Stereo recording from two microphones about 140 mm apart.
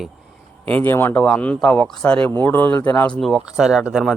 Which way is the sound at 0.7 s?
15° left (ahead or behind).